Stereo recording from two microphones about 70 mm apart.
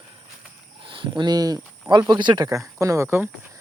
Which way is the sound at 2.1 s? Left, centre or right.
Right.